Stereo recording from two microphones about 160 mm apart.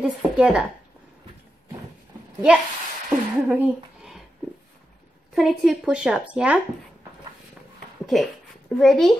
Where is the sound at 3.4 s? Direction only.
10° right (ahead or behind).